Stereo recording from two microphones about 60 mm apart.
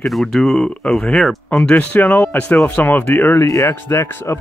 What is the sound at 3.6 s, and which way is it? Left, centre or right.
Speech, left.